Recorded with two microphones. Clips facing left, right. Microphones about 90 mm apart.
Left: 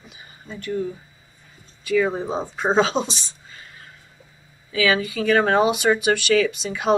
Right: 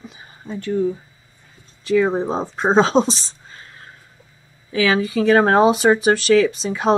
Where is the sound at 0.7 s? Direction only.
15° right (ahead or behind).